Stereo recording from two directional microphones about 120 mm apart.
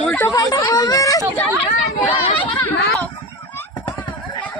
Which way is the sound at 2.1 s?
15° left (ahead or behind).